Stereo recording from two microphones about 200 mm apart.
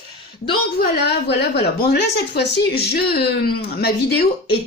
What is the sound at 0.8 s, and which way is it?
A woman's voice, 55° left (ahead or behind).